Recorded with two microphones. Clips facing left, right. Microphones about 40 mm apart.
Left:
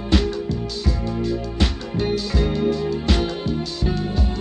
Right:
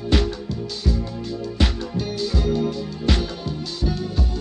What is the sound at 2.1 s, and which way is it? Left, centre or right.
Music, centre.